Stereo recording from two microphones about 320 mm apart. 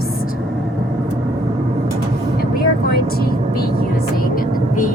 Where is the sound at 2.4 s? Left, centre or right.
Left.